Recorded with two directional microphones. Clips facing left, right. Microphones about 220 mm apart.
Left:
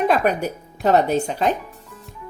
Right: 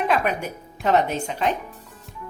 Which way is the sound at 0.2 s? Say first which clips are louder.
Left 5 dB; 40° left (ahead or behind).